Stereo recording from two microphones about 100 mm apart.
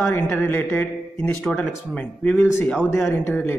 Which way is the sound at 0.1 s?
25° left (ahead or behind).